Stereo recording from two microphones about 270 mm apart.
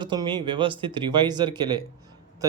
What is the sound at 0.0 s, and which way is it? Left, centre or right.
Speech, centre.